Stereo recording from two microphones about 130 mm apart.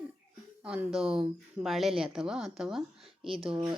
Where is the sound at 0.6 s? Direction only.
5° right (ahead or behind).